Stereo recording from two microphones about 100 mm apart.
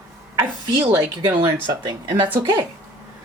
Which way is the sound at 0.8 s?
55° right (ahead or behind).